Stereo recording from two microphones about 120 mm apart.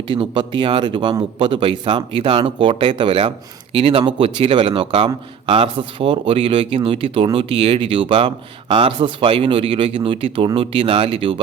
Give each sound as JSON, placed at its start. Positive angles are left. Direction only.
{"t": 0.1, "sound": "speech", "side_deg": -40}